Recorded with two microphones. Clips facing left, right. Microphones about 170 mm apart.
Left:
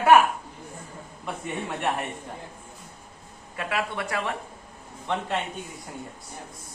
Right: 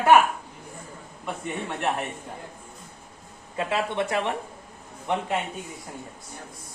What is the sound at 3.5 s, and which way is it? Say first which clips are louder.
A man's voice: right 3 dB; 25° right (ahead or behind).